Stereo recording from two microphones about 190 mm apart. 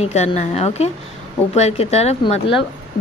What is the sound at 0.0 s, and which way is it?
A woman's voice, 35° left (ahead or behind).